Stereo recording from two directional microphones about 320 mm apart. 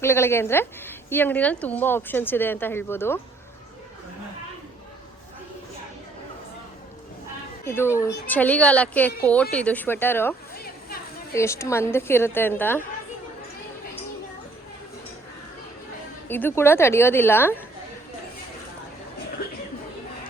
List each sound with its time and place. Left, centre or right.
0.0 s speech: centre
7.6 s speech: centre
10.5 s a sound: left
11.3 s speech: centre
16.3 s speech: centre